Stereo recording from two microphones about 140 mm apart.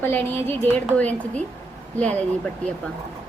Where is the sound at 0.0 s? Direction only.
15° left (ahead or behind).